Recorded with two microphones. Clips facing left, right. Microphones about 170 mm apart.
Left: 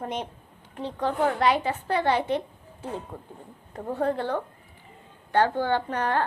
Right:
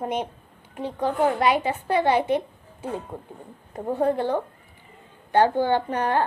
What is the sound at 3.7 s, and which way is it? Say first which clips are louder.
A woman's voice: right 4 dB; 15° right (ahead or behind).